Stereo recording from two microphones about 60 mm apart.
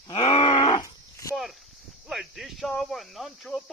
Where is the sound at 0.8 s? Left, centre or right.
Left.